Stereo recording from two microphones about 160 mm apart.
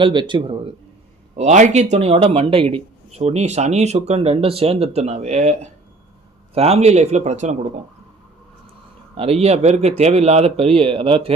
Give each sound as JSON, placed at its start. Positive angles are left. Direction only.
{"t": 0.0, "sound": "speech", "side_deg": -30}
{"t": 1.4, "sound": "speech", "side_deg": -45}
{"t": 9.1, "sound": "speech", "side_deg": -40}